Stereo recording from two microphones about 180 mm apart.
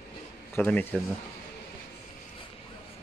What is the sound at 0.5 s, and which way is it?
Speech, 10° left (ahead or behind).